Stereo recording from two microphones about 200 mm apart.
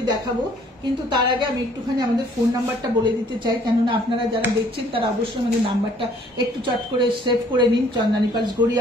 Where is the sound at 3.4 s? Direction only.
25° right (ahead or behind).